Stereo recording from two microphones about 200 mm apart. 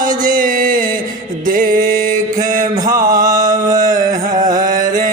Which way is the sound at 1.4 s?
45° right (ahead or behind).